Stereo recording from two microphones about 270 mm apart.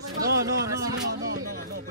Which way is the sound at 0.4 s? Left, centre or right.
Centre.